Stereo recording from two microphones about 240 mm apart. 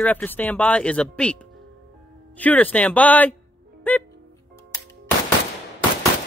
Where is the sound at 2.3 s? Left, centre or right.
Centre.